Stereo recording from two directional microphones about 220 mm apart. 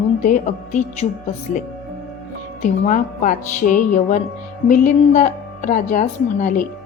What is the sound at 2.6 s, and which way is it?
A woman's voice, 35° left (ahead or behind).